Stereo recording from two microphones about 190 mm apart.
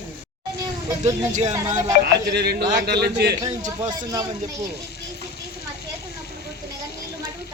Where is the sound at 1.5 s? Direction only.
15° right (ahead or behind).